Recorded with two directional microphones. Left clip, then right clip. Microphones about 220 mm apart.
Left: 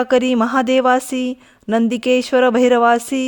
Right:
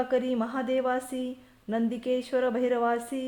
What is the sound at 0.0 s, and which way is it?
Speech, 45° left (ahead or behind).